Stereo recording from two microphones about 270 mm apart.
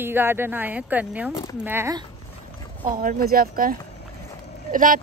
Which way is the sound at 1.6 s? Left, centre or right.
Centre.